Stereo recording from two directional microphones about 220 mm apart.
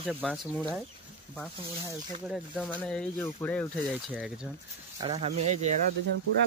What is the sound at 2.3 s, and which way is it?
Speech, centre (ahead or behind).